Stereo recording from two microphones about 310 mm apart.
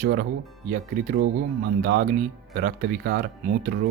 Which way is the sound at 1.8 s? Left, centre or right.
Right.